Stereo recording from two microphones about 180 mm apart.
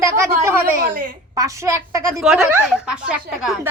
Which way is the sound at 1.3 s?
20° right (ahead or behind).